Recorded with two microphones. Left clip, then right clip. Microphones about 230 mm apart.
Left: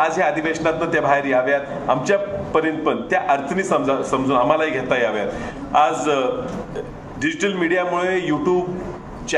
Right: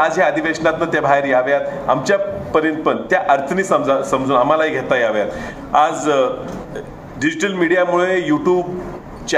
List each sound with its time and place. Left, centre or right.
0.0 s a man's voice: right